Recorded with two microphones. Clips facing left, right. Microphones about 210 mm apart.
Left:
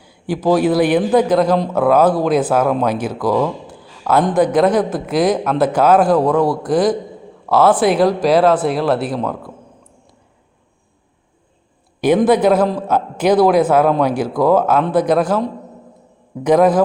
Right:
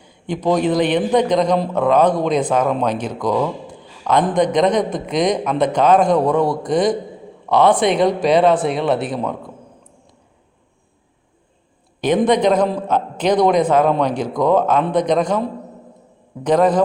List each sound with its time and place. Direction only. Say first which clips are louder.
0.0 s a man's voice: left 2 dB; 5° left (ahead or behind)
3.4 s a sound: left 2 dB; 5° left (ahead or behind)
4.4 s speech: left 3 dB; 5° left (ahead or behind)
11.9 s a man's voice: left 3 dB; 10° left (ahead or behind)